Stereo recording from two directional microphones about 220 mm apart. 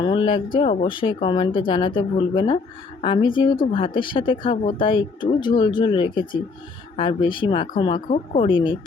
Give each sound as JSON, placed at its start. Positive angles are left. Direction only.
{"t": 0.0, "sound": "speech", "side_deg": 20}